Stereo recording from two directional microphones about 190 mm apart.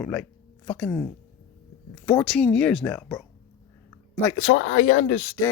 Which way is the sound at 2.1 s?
5° left (ahead or behind).